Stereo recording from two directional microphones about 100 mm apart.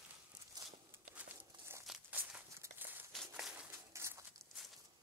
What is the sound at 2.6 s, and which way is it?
Walk, 20° right (ahead or behind).